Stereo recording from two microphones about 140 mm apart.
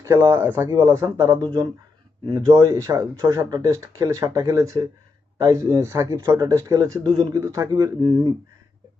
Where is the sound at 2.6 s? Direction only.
20° right (ahead or behind).